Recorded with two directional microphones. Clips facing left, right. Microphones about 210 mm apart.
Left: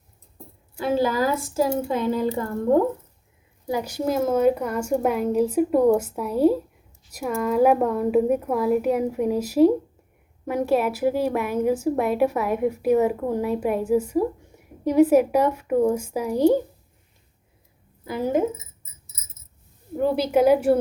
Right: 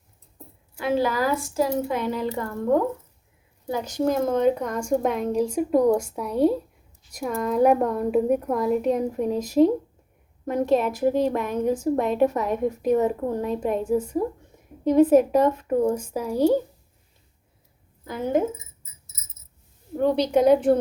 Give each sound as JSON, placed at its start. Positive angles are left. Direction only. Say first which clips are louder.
{"t": 0.8, "sound": "a woman's voice", "louder": "left 1 dB", "side_deg": 30}
{"t": 2.3, "sound": "a woman's voice", "louder": "left 2 dB", "side_deg": 30}
{"t": 3.7, "sound": "a woman's voice", "louder": "right 1 dB", "side_deg": 10}
{"t": 18.0, "sound": "a woman's voice", "louder": "left 1 dB", "side_deg": 10}
{"t": 20.0, "sound": "a woman's voice", "louder": "even", "side_deg": 5}